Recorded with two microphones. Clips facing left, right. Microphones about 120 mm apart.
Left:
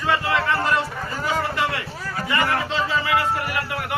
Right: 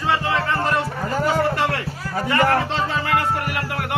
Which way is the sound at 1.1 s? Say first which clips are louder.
Right 5 dB; 55° right (ahead or behind).